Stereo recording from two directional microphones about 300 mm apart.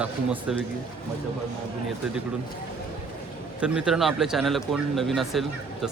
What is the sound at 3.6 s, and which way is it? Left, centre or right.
Speech, centre.